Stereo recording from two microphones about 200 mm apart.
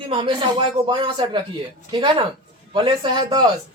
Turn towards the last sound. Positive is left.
turn(degrees=-20)  # may be behind; listen again after turning